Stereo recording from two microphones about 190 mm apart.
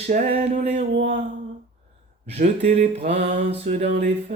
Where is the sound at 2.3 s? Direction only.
35° right (ahead or behind).